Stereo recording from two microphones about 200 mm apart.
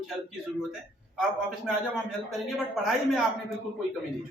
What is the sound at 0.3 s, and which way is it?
A man's voice, 5° right (ahead or behind).